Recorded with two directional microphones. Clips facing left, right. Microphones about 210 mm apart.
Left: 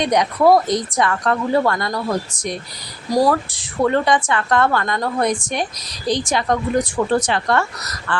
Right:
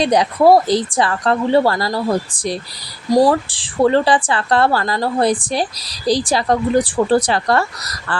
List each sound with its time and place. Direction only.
0.0 s speech: 30° right (ahead or behind)